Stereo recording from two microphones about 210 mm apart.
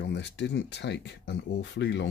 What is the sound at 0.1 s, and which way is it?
Speech, 55° left (ahead or behind).